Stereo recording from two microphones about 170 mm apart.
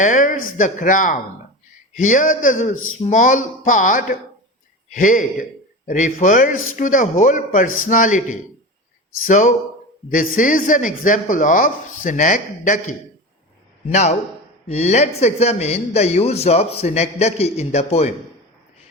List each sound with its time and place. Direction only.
0.0 s speech: 50° left (ahead or behind)